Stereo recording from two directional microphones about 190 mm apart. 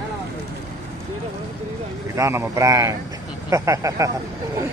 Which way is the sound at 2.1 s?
15° right (ahead or behind).